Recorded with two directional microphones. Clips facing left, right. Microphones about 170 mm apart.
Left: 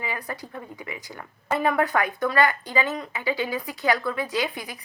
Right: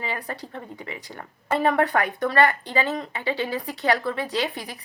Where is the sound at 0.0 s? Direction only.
30° right (ahead or behind).